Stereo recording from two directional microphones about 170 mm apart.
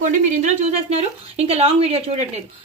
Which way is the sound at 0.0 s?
40° right (ahead or behind).